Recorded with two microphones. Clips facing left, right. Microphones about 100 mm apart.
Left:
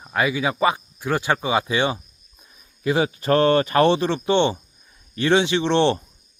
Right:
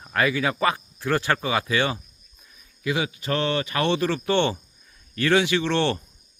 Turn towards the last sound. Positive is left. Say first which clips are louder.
# left 4 dB
turn(degrees=25)  # may be behind; listen again after turning